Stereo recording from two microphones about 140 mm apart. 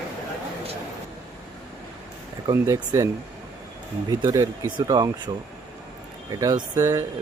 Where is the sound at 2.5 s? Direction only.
15° right (ahead or behind).